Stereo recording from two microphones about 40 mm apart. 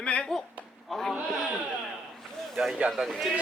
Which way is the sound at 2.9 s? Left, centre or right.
Centre.